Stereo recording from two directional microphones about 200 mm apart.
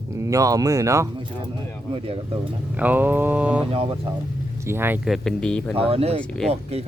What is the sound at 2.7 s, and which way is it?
Speech, 10° right (ahead or behind).